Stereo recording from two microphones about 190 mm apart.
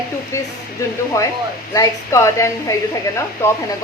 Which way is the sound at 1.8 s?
15° left (ahead or behind).